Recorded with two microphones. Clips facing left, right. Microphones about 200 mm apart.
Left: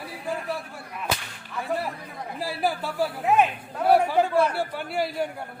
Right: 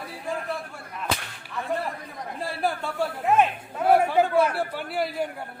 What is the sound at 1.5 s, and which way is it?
A man's voice, centre (ahead or behind).